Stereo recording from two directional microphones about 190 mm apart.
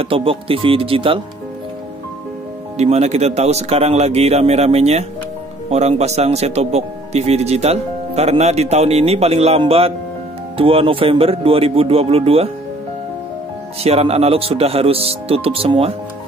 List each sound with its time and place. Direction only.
0.0 s speech: 30° right (ahead or behind)
2.8 s speech: 35° right (ahead or behind)
13.8 s speech: 30° right (ahead or behind)